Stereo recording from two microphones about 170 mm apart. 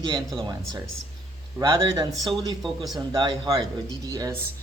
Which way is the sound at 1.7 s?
30° right (ahead or behind).